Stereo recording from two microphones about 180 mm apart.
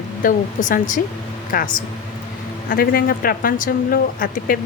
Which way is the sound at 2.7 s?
55° left (ahead or behind).